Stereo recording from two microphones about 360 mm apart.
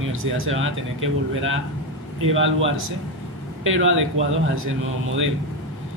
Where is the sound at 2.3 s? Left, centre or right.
Right.